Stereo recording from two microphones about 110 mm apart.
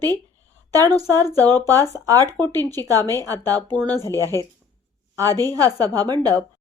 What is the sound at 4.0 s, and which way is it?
Speech, 25° left (ahead or behind).